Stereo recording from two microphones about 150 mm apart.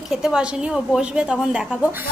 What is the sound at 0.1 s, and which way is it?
A woman's voice, 5° right (ahead or behind).